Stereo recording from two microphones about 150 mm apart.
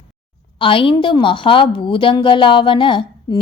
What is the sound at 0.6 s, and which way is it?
A woman's voice, 35° left (ahead or behind).